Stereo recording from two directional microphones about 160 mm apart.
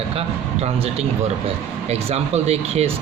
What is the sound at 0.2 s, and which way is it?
A man's voice, 40° right (ahead or behind).